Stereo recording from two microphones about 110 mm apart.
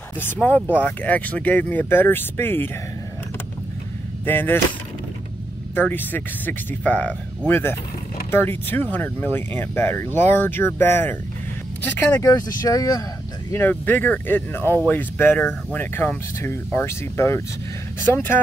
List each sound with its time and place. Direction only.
0.2 s speech: 15° left (ahead or behind)
4.3 s speech: 15° left (ahead or behind)
5.8 s speech: 15° left (ahead or behind)
12.2 s speech: 30° left (ahead or behind)
13.5 s speech: 15° left (ahead or behind)